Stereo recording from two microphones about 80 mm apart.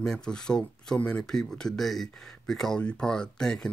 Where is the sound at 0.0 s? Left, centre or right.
Centre.